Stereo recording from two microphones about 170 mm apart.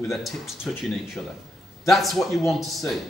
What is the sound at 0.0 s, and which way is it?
Speech, centre (ahead or behind).